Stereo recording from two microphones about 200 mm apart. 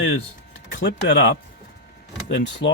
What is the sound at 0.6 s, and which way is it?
Speech, 65° left (ahead or behind).